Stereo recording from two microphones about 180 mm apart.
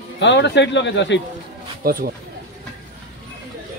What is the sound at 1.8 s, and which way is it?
Speech, 55° right (ahead or behind).